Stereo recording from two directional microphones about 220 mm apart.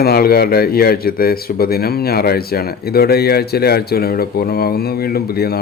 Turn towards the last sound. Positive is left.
turn(degrees=45)  # may be behind; listen again after turning